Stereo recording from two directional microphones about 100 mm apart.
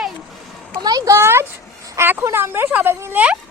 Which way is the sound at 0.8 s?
35° right (ahead or behind).